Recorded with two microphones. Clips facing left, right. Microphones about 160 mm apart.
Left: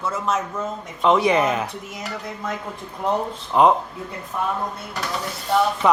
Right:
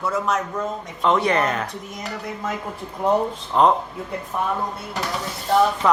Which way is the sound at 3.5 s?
10° left (ahead or behind).